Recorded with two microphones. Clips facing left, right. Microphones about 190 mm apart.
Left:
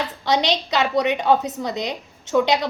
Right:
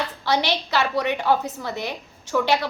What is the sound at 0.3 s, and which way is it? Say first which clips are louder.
A woman's voice: left 3 dB; 20° left (ahead or behind).